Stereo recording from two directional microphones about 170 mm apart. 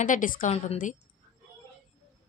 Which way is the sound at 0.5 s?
40° left (ahead or behind).